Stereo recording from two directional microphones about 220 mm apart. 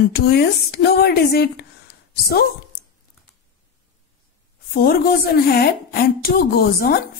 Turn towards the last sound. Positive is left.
turn(degrees=45)  # may be behind; listen again after turning